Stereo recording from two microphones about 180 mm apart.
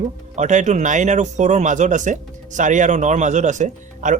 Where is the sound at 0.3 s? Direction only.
40° right (ahead or behind).